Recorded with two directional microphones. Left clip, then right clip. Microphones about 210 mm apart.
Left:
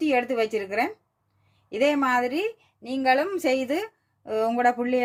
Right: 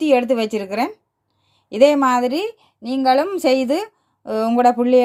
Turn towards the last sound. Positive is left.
turn(degrees=-30)  # may be behind; listen again after turning